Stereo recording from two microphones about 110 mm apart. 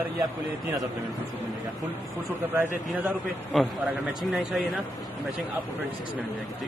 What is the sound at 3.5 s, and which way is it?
A man's voice, centre (ahead or behind).